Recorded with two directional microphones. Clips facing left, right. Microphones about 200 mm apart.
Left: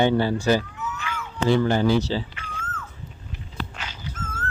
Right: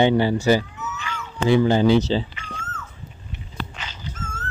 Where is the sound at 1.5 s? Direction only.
15° right (ahead or behind).